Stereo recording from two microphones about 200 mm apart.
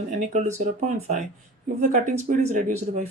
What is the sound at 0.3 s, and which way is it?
Speech, 40° right (ahead or behind).